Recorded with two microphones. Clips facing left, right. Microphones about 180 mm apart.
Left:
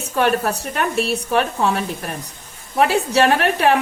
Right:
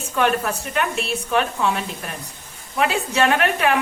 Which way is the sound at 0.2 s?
40° left (ahead or behind).